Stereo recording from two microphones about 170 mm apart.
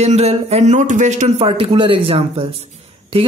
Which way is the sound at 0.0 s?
40° right (ahead or behind).